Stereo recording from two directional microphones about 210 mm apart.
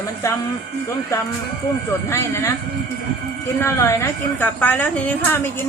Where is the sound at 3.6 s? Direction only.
15° left (ahead or behind).